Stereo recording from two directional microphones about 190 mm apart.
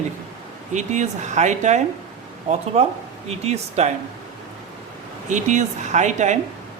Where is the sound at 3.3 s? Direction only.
35° right (ahead or behind).